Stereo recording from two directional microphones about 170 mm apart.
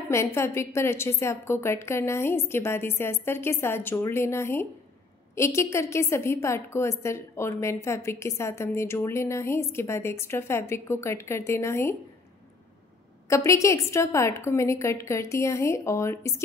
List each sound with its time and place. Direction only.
0.1 s a woman's voice: 15° left (ahead or behind)
13.3 s a woman's voice: 15° left (ahead or behind)